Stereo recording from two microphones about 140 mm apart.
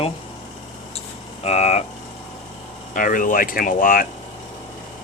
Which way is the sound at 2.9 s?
75° left (ahead or behind).